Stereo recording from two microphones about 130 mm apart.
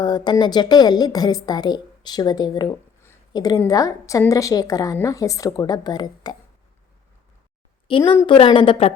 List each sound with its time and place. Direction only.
0.0 s a woman's voice: 35° left (ahead or behind)
7.9 s a woman's voice: 40° left (ahead or behind)